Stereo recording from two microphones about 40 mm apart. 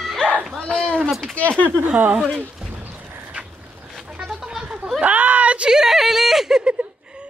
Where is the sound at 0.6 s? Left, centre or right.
Centre.